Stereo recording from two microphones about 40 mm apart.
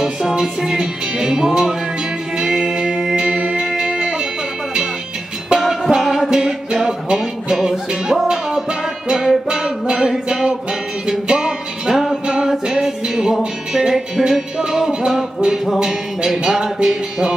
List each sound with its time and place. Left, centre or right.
0.0 s music: centre
5.5 s music: right